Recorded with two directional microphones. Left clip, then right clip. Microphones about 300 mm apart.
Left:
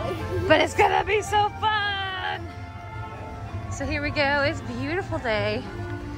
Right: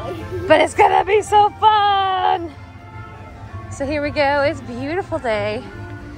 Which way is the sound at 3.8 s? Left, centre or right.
Centre.